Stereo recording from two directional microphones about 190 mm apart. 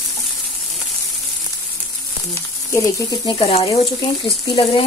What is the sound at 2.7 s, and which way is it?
Speech, 15° left (ahead or behind).